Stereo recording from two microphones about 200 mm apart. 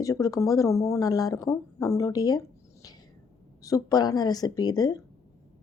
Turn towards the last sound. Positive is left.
turn(degrees=20)  # may be behind; listen again after turning